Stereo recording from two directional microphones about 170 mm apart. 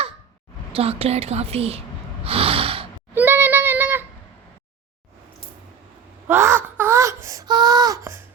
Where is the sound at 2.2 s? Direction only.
35° right (ahead or behind).